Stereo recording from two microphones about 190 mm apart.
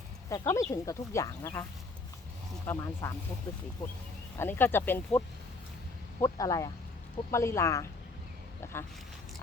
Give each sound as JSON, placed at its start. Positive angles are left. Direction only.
{"t": 0.3, "sound": "speech", "side_deg": 15}
{"t": 2.6, "sound": "speech", "side_deg": 15}
{"t": 4.4, "sound": "speech", "side_deg": 10}